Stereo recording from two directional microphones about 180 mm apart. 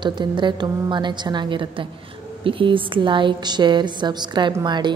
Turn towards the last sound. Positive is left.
turn(degrees=-25)  # may be behind; listen again after turning